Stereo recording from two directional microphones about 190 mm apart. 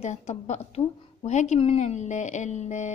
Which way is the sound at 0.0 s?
35° left (ahead or behind).